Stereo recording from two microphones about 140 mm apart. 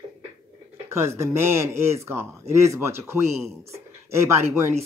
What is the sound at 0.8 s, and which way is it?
Speech, 20° right (ahead or behind).